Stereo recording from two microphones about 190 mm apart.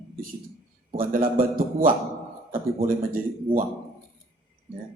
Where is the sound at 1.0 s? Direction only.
50° right (ahead or behind).